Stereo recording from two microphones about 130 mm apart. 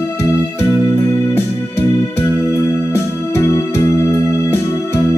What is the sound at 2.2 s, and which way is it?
Music, 25° left (ahead or behind).